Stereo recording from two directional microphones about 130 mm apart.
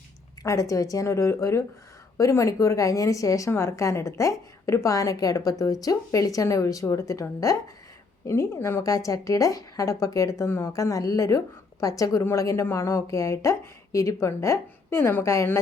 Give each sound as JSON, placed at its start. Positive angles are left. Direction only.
{"t": 0.4, "sound": "a woman's voice", "side_deg": 25}